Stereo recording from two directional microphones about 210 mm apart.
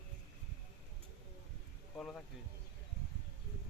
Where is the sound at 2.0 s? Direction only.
5° left (ahead or behind).